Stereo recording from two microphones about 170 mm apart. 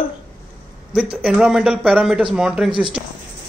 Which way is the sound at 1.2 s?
5° right (ahead or behind).